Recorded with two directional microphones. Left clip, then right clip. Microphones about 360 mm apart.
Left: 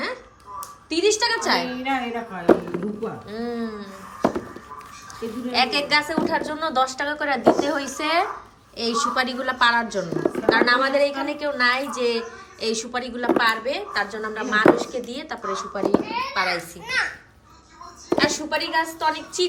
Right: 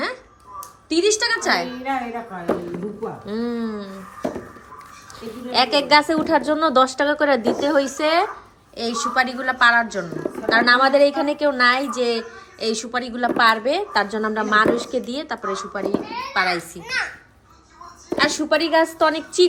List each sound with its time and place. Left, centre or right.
0.6 s a woman's voice: centre
5.5 s a woman's voice: centre
18.1 s a woman's voice: centre